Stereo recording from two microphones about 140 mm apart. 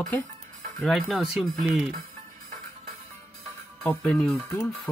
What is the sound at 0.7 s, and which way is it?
Speech, 5° left (ahead or behind).